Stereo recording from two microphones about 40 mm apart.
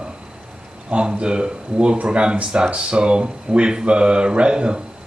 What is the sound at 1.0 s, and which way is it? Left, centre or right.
Speech, right.